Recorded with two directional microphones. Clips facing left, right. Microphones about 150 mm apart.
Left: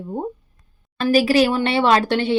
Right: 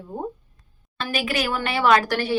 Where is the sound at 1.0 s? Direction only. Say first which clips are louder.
Left 10 dB; 40° left (ahead or behind).